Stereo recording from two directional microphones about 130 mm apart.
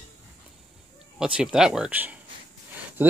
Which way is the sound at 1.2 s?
5° right (ahead or behind).